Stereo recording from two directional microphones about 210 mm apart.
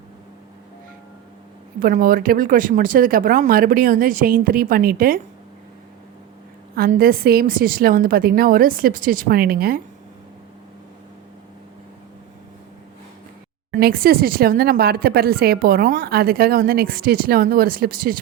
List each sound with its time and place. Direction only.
1.8 s speech: 40° right (ahead or behind)
6.7 s speech: 45° right (ahead or behind)
13.7 s speech: 45° right (ahead or behind)